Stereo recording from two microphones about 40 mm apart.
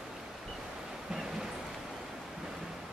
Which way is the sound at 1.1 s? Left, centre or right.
Centre.